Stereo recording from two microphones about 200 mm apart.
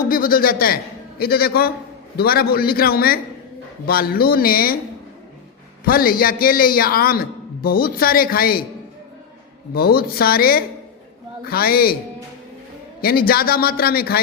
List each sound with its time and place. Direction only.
0.1 s a man's voice: 45° left (ahead or behind)
5.8 s a man's voice: 45° left (ahead or behind)
9.7 s a man's voice: 50° left (ahead or behind)
13.0 s a man's voice: 50° left (ahead or behind)